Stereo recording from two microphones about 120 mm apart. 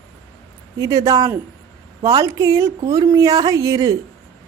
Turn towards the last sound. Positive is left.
turn(degrees=-30)  # may be behind; listen again after turning